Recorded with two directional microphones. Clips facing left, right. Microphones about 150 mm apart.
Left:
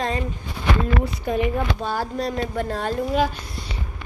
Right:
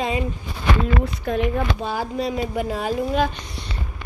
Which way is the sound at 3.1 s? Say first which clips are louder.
Even; 5° left (ahead or behind).